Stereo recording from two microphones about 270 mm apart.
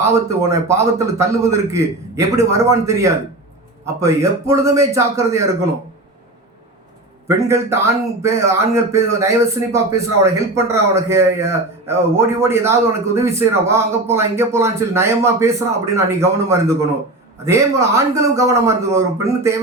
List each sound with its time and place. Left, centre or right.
0.0 s a man's voice: centre
7.3 s a man's voice: centre